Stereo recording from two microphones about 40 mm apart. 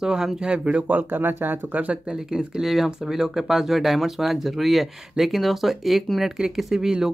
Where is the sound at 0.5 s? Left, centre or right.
Right.